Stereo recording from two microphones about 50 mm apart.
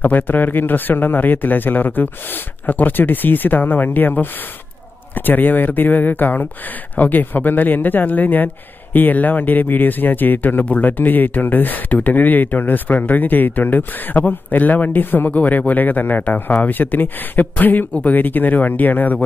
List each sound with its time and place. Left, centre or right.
0.0 s speech: left